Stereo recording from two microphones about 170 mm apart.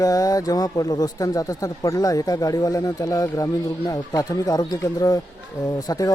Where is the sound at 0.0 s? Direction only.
20° left (ahead or behind).